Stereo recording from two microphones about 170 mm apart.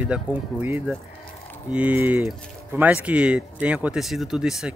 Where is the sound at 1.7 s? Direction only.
10° right (ahead or behind).